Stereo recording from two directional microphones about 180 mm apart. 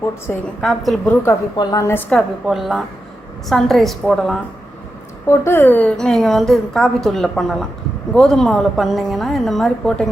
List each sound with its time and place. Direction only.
0.3 s a woman's voice: centre (ahead or behind)
1.2 s a woman's voice: 20° left (ahead or behind); by 4.4 s centre (ahead or behind)
5.3 s a woman's voice: 15° left (ahead or behind)